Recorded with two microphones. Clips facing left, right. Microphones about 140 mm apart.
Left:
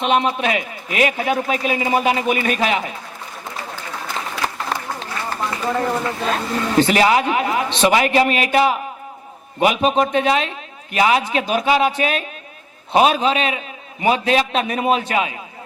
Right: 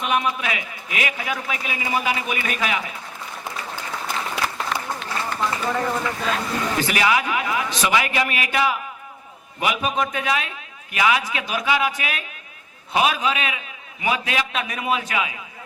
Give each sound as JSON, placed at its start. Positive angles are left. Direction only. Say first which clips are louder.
{"t": 0.0, "sound": "a man's voice", "louder": "left 5 dB", "side_deg": 25}
{"t": 4.4, "sound": "run", "louder": "left 2 dB", "side_deg": 35}
{"t": 5.6, "sound": "a man's voice", "louder": "left 6 dB", "side_deg": 25}
{"t": 6.2, "sound": "a man's voice", "louder": "left 3 dB", "side_deg": 40}